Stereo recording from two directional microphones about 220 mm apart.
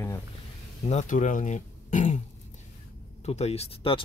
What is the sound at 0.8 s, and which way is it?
Speech, 35° left (ahead or behind).